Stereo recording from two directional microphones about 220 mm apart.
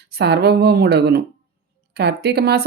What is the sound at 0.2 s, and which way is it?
A woman's voice, 50° right (ahead or behind).